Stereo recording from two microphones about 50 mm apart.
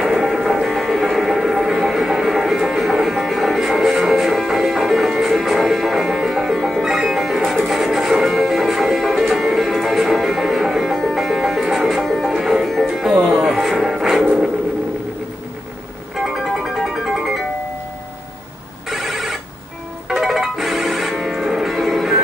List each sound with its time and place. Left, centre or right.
0.0 s music: centre
14.2 s a sound: centre
16.8 s music: centre
18.9 s telephone bell ringing: centre
20.1 s music: centre